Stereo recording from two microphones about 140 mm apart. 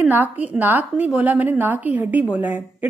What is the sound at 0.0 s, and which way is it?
A woman's voice, 10° right (ahead or behind).